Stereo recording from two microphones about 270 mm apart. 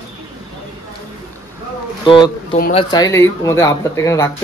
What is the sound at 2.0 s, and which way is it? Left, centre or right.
Speech, centre.